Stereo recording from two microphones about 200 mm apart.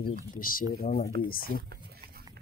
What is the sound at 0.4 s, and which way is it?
Speech, 45° left (ahead or behind).